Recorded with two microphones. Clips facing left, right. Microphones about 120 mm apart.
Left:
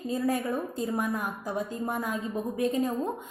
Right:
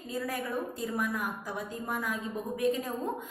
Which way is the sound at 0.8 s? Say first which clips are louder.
Left 3 dB; 25° left (ahead or behind).